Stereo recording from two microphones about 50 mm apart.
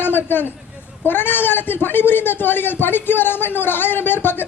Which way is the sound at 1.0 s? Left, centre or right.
Left.